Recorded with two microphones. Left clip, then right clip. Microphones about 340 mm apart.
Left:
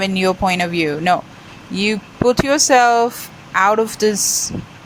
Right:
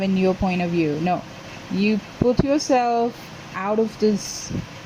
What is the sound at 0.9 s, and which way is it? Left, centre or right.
Speech, left.